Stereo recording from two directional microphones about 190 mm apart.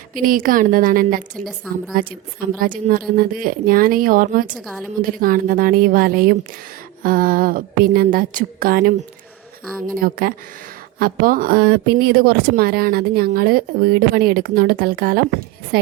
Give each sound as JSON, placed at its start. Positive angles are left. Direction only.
{"t": 0.1, "sound": "a woman's voice", "side_deg": -45}
{"t": 4.4, "sound": "a woman's voice", "side_deg": -5}
{"t": 5.0, "sound": "a woman's voice", "side_deg": -45}
{"t": 10.0, "sound": "a woman's voice", "side_deg": -50}